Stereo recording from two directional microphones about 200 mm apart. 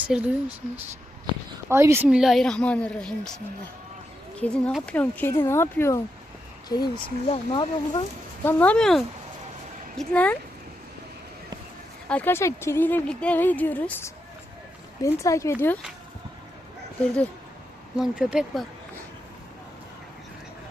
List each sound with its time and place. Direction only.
0.1 s speech: 5° right (ahead or behind)
1.7 s speech: 10° right (ahead or behind); by 8.0 s 25° left (ahead or behind)
8.4 s speech: 10° left (ahead or behind)
12.0 s speech: 10° left (ahead or behind)
17.9 s speech: 5° right (ahead or behind)